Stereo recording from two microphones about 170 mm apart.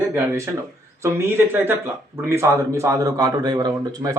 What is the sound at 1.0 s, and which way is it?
Speech, 15° right (ahead or behind).